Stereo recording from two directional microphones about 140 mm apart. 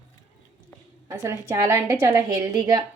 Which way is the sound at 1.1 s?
20° right (ahead or behind).